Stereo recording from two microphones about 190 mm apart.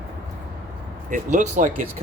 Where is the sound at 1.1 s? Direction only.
40° right (ahead or behind).